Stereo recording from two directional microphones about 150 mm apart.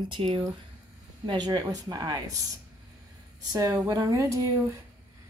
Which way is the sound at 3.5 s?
25° right (ahead or behind).